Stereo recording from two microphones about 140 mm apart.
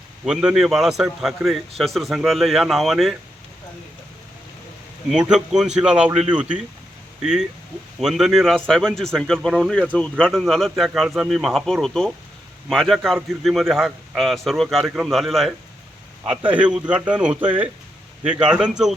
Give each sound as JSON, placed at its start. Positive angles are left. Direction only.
{"t": 0.3, "sound": "a man's voice", "side_deg": -5}
{"t": 5.0, "sound": "a man's voice", "side_deg": -5}
{"t": 16.2, "sound": "speech", "side_deg": -40}
{"t": 16.5, "sound": "a man's voice", "side_deg": -10}